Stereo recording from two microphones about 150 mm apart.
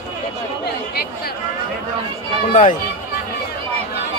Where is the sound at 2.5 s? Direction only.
60° left (ahead or behind).